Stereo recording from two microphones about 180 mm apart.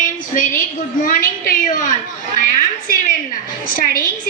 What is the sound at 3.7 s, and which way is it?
Speech, 50° left (ahead or behind).